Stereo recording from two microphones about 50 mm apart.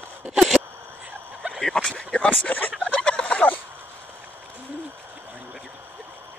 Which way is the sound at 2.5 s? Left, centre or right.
Left.